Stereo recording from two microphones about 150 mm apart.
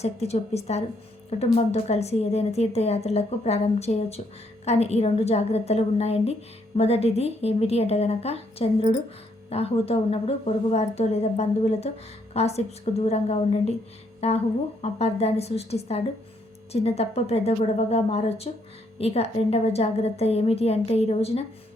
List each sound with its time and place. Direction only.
0.0 s a woman's voice: 45° left (ahead or behind)